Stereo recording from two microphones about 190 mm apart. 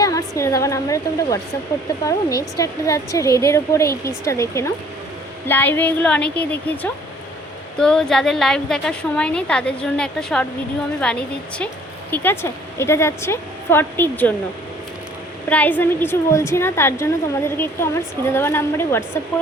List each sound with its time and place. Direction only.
0.0 s a woman's voice: 20° left (ahead or behind)
15.4 s a woman's voice: 10° left (ahead or behind)